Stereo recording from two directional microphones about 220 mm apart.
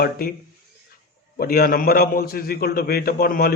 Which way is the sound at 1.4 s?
45° left (ahead or behind).